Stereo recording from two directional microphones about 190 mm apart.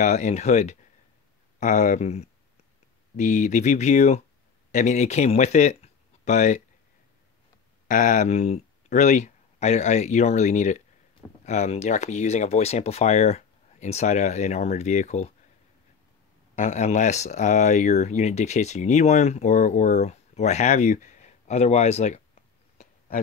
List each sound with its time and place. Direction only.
0.0 s speech: 40° left (ahead or behind)
7.9 s speech: 40° left (ahead or behind)
16.5 s speech: 40° left (ahead or behind)
22.8 s a sound: 45° left (ahead or behind)